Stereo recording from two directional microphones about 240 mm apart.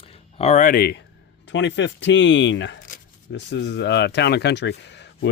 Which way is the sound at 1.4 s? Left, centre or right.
Left.